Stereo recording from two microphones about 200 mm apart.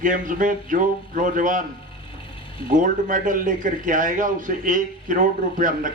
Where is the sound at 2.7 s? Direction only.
40° right (ahead or behind).